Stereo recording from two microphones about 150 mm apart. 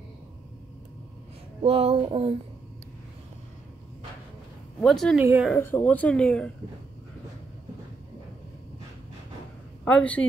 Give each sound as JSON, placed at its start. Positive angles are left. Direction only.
{"t": 1.6, "sound": "a sound", "side_deg": -40}
{"t": 4.7, "sound": "speech", "side_deg": 5}
{"t": 5.6, "sound": "speech", "side_deg": 15}
{"t": 9.8, "sound": "speech", "side_deg": 10}